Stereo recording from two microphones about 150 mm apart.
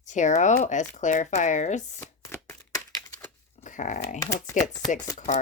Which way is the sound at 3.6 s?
55° left (ahead or behind).